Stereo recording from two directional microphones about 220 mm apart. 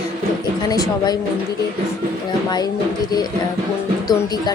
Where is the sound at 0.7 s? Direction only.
15° left (ahead or behind).